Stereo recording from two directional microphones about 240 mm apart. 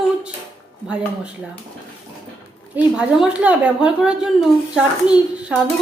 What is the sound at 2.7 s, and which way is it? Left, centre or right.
A woman's voice, centre.